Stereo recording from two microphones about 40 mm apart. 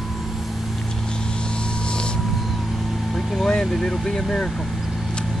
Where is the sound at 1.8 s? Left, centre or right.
Left.